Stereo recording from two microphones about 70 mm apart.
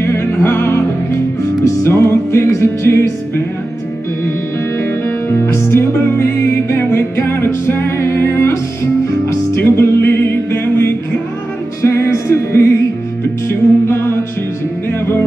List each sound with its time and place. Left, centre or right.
0.0 s music: left
4.7 s music: left
9.6 s music: left